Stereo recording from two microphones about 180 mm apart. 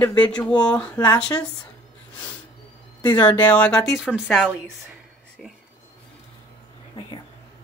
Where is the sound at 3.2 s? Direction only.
10° left (ahead or behind).